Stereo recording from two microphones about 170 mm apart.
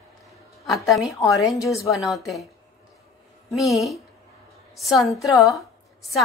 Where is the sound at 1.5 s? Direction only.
20° left (ahead or behind).